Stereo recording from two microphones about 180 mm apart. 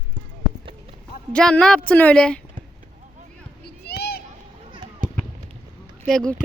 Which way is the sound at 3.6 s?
65° left (ahead or behind).